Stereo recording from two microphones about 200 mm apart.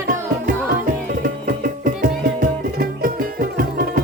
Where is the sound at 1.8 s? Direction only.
45° right (ahead or behind).